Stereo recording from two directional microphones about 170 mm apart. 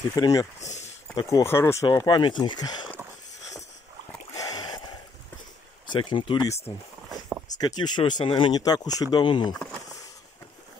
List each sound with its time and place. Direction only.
0.1 s speech: 20° left (ahead or behind)
0.6 s speech: 40° left (ahead or behind)
1.1 s speech: 15° left (ahead or behind)
4.3 s a sound: 20° left (ahead or behind)
5.9 s speech: 25° left (ahead or behind)
7.5 s speech: 25° left (ahead or behind)